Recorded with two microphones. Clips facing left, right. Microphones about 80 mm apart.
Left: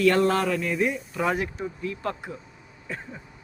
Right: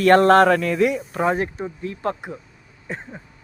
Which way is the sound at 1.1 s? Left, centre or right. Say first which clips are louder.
Right 2 dB; right.